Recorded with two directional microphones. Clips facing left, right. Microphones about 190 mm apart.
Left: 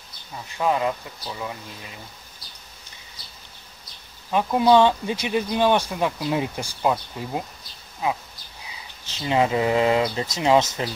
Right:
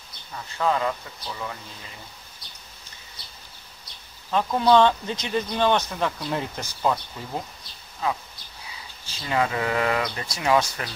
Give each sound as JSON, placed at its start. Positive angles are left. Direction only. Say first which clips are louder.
{"t": 0.5, "sound": "speech", "louder": "left 1 dB", "side_deg": 15}
{"t": 4.3, "sound": "speech", "louder": "left 2 dB", "side_deg": 10}